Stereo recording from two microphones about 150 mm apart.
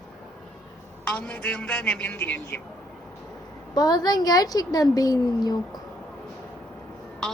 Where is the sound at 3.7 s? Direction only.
25° left (ahead or behind).